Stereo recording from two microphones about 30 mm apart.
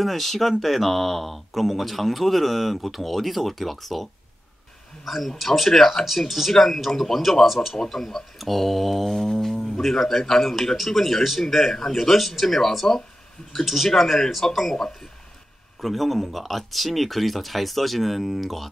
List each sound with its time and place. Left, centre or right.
0.0 s speech: centre
6.0 s speech: centre
12.8 s speech: centre
13.5 s speech: centre
15.8 s speech: centre